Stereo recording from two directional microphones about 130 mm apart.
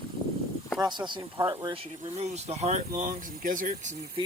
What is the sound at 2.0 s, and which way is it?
Speech, 55° right (ahead or behind).